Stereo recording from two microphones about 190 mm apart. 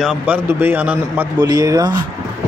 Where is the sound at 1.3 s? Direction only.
20° right (ahead or behind).